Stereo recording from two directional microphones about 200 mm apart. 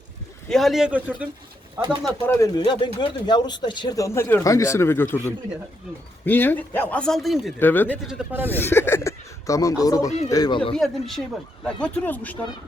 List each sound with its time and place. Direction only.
0.4 s a man's voice: centre (ahead or behind)
2.0 s speech: 10° left (ahead or behind)
8.0 s speech: 10° right (ahead or behind)
8.5 s speech: 10° left (ahead or behind)
10.8 s a man's voice: centre (ahead or behind)